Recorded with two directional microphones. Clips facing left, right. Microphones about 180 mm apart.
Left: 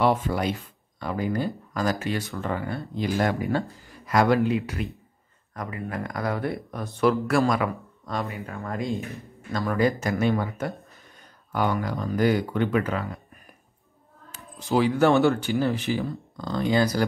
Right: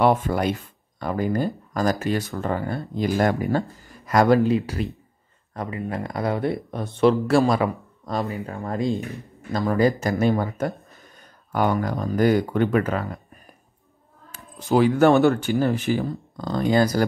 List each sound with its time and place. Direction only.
0.0 s speech: 50° right (ahead or behind)
14.7 s speech: 50° right (ahead or behind)